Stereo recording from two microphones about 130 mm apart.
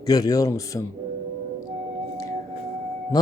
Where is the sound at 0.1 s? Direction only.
30° left (ahead or behind).